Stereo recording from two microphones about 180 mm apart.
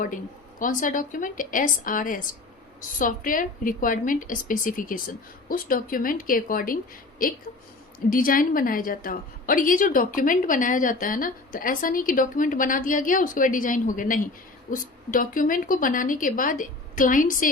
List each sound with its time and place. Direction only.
0.6 s a woman's voice: 50° left (ahead or behind)
8.1 s a woman's voice: 50° left (ahead or behind)